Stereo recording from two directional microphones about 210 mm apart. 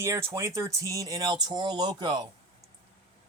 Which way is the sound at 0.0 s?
15° right (ahead or behind).